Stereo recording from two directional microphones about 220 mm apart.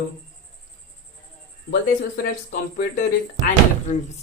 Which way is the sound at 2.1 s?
35° left (ahead or behind).